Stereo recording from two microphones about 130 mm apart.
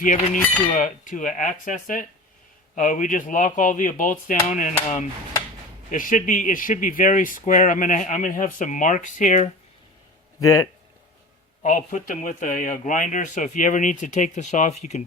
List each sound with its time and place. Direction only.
0.7 s speech: 85° left
4.4 s speech: 70° left (ahead or behind)
5.9 s speech: 85° left
10.4 s speech: 25° left (ahead or behind)
11.6 s speech: 70° left (ahead or behind)